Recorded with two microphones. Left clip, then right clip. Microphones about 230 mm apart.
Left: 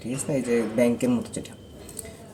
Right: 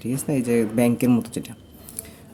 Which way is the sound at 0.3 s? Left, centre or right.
Right.